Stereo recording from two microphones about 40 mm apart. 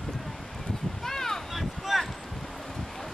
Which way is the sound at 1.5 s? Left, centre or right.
Centre.